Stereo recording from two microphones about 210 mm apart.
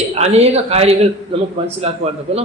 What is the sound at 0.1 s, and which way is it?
A man's voice, 30° right (ahead or behind).